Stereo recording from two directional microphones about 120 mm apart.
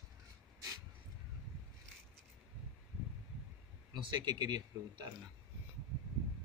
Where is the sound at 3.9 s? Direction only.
40° right (ahead or behind).